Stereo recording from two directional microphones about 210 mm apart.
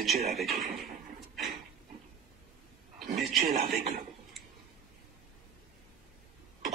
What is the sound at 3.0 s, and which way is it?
Speech, 35° right (ahead or behind).